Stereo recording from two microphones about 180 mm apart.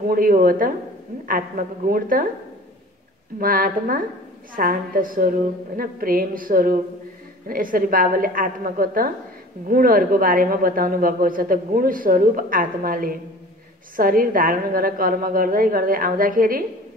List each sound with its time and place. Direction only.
0.0 s a woman's voice: 55° right (ahead or behind)
3.3 s a woman's voice: 50° right (ahead or behind)